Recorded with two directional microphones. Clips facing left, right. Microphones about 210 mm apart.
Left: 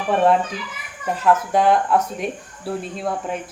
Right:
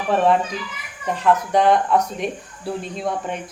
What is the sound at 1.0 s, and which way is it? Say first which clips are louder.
Speech: even; 5° left (ahead or behind).